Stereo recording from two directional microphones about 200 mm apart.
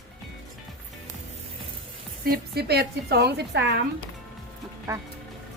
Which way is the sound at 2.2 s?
50° right (ahead or behind).